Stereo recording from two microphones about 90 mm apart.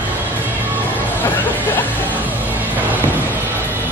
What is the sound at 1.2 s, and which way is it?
Speech, 20° left (ahead or behind).